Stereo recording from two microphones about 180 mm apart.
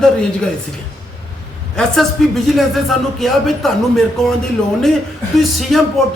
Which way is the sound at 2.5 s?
Centre (ahead or behind).